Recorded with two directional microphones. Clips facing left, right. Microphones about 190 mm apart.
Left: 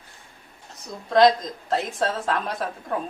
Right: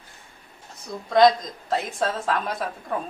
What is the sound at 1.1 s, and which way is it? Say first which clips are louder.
A woman's voice: even; centre (ahead or behind).